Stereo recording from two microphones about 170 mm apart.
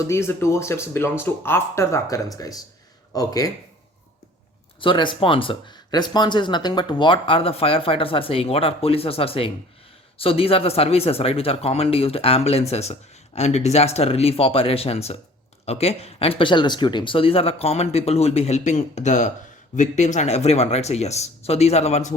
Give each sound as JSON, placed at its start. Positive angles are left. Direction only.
{"t": 0.1, "sound": "speech", "side_deg": 15}
{"t": 4.8, "sound": "speech", "side_deg": 30}